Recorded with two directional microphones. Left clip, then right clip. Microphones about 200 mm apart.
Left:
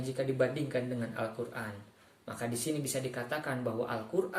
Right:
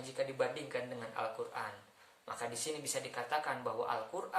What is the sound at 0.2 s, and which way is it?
A woman's voice, 5° right (ahead or behind).